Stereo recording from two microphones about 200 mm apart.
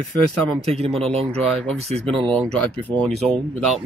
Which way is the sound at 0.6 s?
30° right (ahead or behind).